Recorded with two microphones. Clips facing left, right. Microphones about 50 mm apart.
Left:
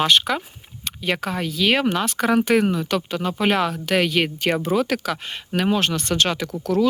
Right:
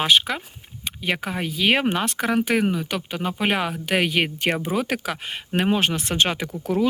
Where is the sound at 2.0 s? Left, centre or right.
Centre.